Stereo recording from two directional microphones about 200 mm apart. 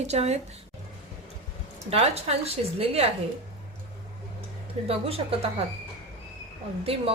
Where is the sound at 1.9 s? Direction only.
30° right (ahead or behind).